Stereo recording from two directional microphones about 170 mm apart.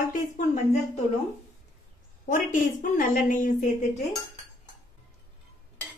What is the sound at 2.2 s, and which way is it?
A woman's voice, 50° left (ahead or behind).